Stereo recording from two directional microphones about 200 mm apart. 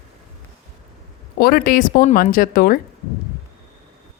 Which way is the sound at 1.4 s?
45° left (ahead or behind).